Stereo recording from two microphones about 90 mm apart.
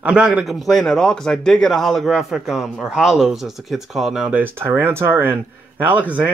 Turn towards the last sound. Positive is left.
turn(degrees=-15)  # may be behind; listen again after turning